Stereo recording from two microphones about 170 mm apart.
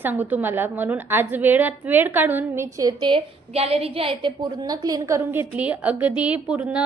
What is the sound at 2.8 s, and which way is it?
A woman's voice, 25° right (ahead or behind).